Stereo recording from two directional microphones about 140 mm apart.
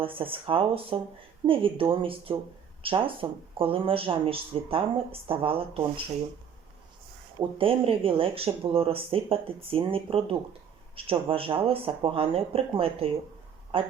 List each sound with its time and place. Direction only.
0.0 s speech: 40° right (ahead or behind)
7.6 s speech: 40° right (ahead or behind)